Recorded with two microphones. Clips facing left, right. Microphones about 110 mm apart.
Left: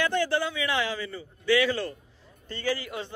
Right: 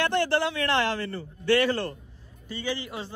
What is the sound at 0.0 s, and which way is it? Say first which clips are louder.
A man's voice: right 2 dB; 65° right (ahead or behind).